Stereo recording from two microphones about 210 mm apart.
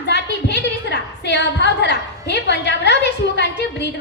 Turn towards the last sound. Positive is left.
turn(degrees=55)  # may be behind; listen again after turning